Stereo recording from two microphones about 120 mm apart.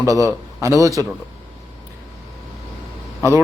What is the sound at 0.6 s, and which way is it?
Speech, 25° right (ahead or behind).